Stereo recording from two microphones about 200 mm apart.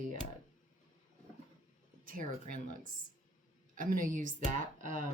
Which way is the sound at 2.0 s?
45° right (ahead or behind).